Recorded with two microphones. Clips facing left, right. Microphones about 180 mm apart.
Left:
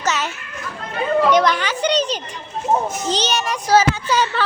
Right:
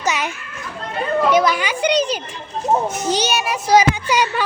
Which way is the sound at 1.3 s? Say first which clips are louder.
Even; 10° right (ahead or behind).